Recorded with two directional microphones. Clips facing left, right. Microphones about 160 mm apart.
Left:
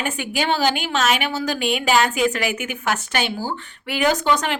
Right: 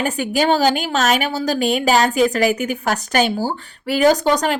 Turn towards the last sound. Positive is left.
turn(degrees=-40)  # may be behind; listen again after turning